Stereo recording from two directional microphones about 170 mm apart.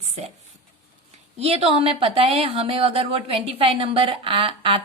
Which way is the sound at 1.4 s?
35° right (ahead or behind).